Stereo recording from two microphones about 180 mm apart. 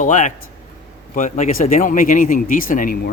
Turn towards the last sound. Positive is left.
turn(degrees=50)  # may be behind; listen again after turning